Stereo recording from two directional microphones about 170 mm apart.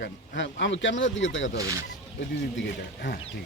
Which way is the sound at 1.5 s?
20° right (ahead or behind).